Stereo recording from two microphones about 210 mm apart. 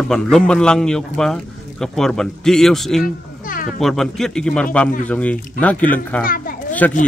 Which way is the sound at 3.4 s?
40° left (ahead or behind).